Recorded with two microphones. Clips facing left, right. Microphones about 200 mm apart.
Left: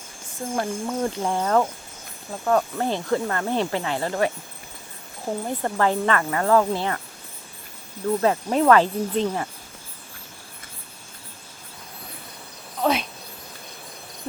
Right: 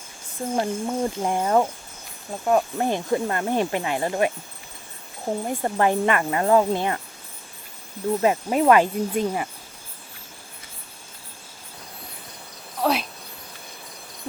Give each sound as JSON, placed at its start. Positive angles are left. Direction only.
{"t": 0.5, "sound": "speech", "side_deg": -20}
{"t": 5.5, "sound": "speech", "side_deg": -15}
{"t": 8.2, "sound": "speech", "side_deg": -15}
{"t": 12.8, "sound": "insect", "side_deg": 0}